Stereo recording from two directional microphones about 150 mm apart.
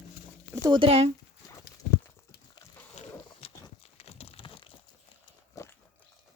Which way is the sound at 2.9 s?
40° left (ahead or behind).